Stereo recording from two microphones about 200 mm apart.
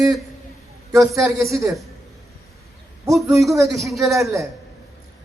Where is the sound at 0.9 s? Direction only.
Centre (ahead or behind).